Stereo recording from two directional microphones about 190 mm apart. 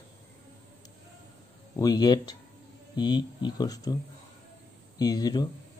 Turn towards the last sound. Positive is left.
turn(degrees=20)  # may be behind; listen again after turning